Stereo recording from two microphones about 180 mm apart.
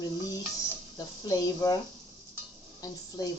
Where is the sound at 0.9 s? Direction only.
20° left (ahead or behind).